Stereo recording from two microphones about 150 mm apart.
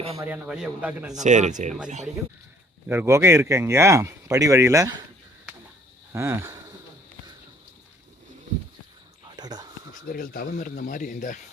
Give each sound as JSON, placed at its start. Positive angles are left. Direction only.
{"t": 0.4, "sound": "a man's voice", "side_deg": -5}
{"t": 1.2, "sound": "speech", "side_deg": -55}
{"t": 2.9, "sound": "speech", "side_deg": -15}
{"t": 6.1, "sound": "a sound", "side_deg": -20}
{"t": 9.3, "sound": "a sound", "side_deg": -25}
{"t": 10.1, "sound": "speech", "side_deg": 75}